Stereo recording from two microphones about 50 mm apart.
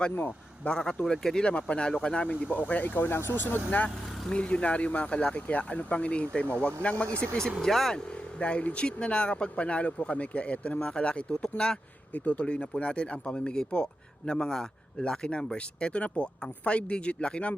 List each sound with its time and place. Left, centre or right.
0.2 s speech: left
0.7 s speech: centre
1.5 s speech: left
2.6 s speech: left
3.0 s speech: left
3.8 s speech: centre
7.9 s speech: left